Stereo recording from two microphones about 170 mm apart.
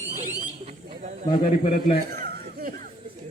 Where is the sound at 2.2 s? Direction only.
55° right (ahead or behind).